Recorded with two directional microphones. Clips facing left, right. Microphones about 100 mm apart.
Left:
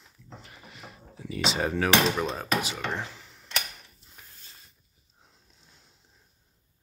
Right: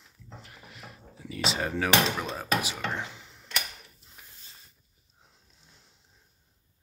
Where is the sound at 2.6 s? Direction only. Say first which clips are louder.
Left 1 dB; 10° right (ahead or behind).